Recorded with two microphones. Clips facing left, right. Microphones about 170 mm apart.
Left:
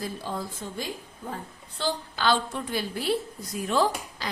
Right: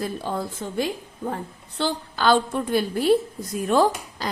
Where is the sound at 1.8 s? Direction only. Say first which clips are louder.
Right 4 dB; 50° right (ahead or behind).